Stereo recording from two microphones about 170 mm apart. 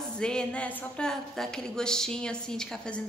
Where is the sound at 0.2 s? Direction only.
5° left (ahead or behind).